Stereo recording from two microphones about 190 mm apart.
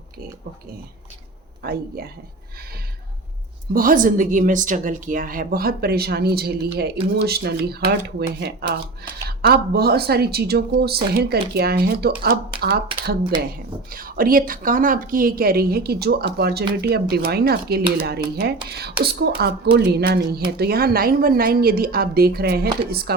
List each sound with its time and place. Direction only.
1.6 s a woman's voice: 55° right (ahead or behind)
3.7 s a woman's voice: 50° right (ahead or behind)
13.9 s a woman's voice: 50° right (ahead or behind)